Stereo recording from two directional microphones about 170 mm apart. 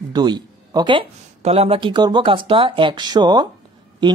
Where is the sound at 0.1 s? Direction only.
25° right (ahead or behind).